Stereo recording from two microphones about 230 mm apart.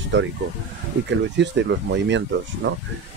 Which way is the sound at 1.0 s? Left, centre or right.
Right.